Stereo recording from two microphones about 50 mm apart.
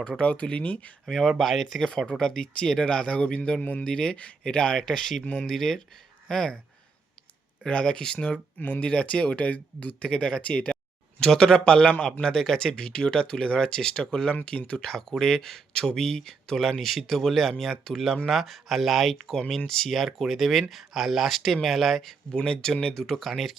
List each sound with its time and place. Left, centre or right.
0.2 s speech: left
1.0 s speech: centre
3.6 s speech: left
3.8 s speech: centre
4.9 s speech: centre
5.2 s speech: centre
5.5 s speech: centre
7.6 s speech: left
8.5 s speech: left
8.8 s speech: left
11.2 s speech: centre